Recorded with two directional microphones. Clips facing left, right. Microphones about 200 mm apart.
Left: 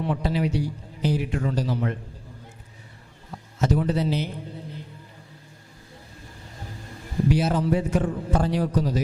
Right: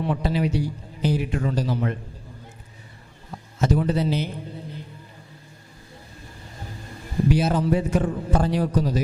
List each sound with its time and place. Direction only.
0.0 s a man's voice: 10° right (ahead or behind)
3.6 s a man's voice: 10° right (ahead or behind)
6.4 s a sound: 15° right (ahead or behind)
8.3 s a man's voice: 10° right (ahead or behind)